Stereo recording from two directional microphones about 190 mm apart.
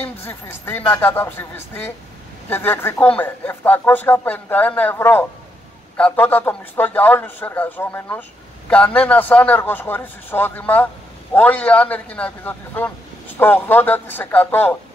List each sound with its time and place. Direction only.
0.0 s speech: 10° left (ahead or behind)